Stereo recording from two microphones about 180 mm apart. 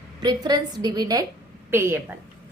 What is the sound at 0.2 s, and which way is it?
A woman's voice, 20° right (ahead or behind).